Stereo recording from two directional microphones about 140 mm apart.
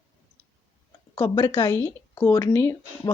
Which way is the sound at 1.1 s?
25° left (ahead or behind).